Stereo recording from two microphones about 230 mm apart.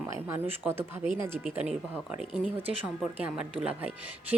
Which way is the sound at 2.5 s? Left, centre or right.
Centre.